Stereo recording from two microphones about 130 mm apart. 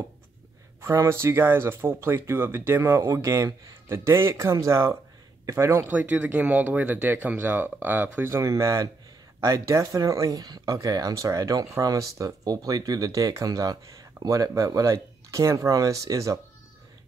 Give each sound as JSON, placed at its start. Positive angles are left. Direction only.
{"t": 0.7, "sound": "speech", "side_deg": -20}